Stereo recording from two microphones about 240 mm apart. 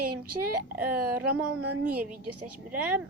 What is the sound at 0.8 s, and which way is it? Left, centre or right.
Speech, centre.